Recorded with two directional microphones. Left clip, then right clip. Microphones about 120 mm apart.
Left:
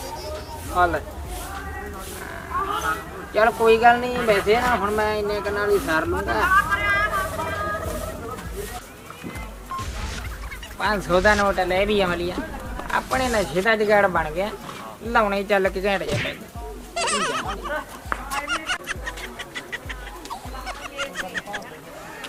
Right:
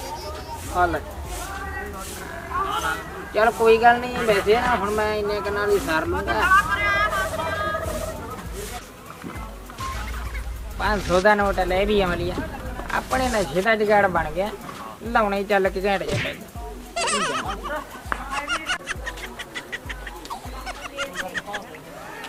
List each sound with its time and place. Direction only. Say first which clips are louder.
0.8 s speech: left 1 dB; 10° left (ahead or behind)
2.6 s wild animals: left 1 dB; 20° right (ahead or behind)
3.3 s speech: even; centre (ahead or behind)
6.6 s vehicle: even; 20° right (ahead or behind)
10.8 s speech: even; 5° left (ahead or behind)
16.9 s a sound: even; centre (ahead or behind)
18.3 s music: even; centre (ahead or behind)